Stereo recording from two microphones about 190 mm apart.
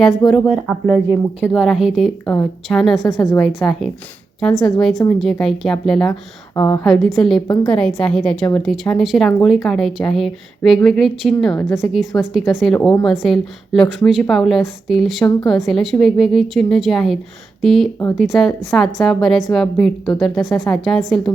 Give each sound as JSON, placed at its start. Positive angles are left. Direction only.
{"t": 0.3, "sound": "a woman's voice", "side_deg": 0}
{"t": 3.2, "sound": "a woman's voice", "side_deg": 15}
{"t": 3.4, "sound": "a woman's voice", "side_deg": 0}
{"t": 6.6, "sound": "a woman's voice", "side_deg": 20}
{"t": 6.9, "sound": "a woman's voice", "side_deg": 0}
{"t": 7.4, "sound": "a woman's voice", "side_deg": 20}
{"t": 7.7, "sound": "a woman's voice", "side_deg": 5}